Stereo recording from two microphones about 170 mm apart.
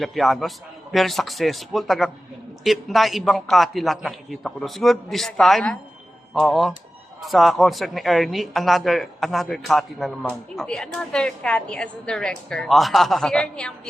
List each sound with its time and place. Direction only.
0.0 s speech: centre (ahead or behind)